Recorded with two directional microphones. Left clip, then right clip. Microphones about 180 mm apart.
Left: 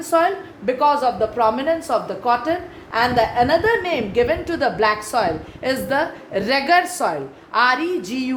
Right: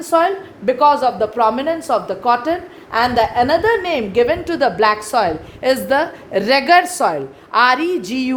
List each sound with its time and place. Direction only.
0.0 s a woman's voice: 40° right (ahead or behind)